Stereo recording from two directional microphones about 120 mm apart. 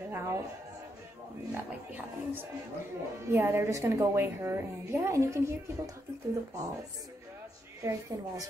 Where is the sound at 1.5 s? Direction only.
15° right (ahead or behind).